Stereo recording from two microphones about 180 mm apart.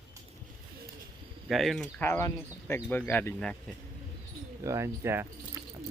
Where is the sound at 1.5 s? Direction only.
Centre (ahead or behind).